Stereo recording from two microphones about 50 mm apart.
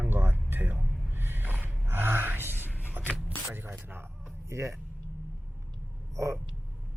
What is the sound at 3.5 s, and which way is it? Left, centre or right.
Speech, right.